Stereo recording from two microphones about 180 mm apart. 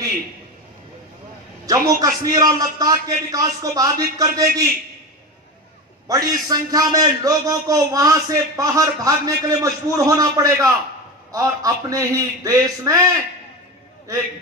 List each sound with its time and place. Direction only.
1.7 s a man's voice: 20° right (ahead or behind)
6.0 s a man's voice: 20° right (ahead or behind)